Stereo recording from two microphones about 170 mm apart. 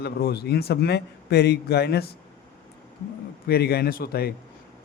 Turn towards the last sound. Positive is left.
turn(degrees=65)  # may be behind; listen again after turning